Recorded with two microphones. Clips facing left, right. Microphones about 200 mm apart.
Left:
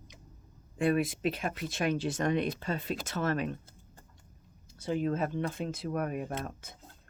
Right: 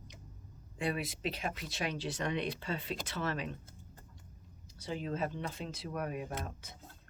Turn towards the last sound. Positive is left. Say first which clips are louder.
# left 5 dB
turn(degrees=50)  # may be behind; listen again after turning